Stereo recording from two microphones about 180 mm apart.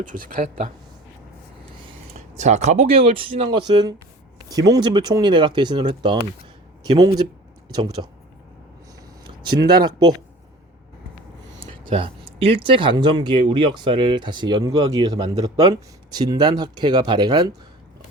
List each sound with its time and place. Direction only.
0.0 s speech: 50° right (ahead or behind)
2.3 s speech: 40° right (ahead or behind); by 8.1 s 25° right (ahead or behind)
9.2 s speech: 25° right (ahead or behind)
11.6 s speech: 30° right (ahead or behind)